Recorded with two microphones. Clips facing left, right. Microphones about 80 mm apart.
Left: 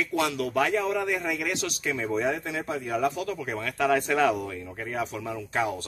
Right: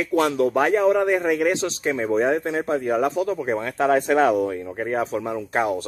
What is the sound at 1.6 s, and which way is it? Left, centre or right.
Speech, right.